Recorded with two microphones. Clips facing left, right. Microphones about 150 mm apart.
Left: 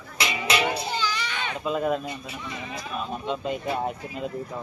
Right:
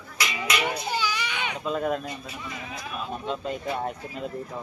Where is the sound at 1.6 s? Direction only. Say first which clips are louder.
Left 2 dB; 5° left (ahead or behind).